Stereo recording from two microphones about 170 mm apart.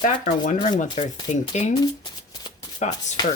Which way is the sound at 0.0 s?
45° left (ahead or behind).